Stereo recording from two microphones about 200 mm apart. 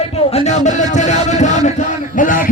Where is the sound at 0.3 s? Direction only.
35° left (ahead or behind).